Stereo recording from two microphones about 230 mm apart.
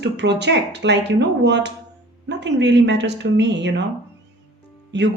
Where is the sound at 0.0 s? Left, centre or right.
Right.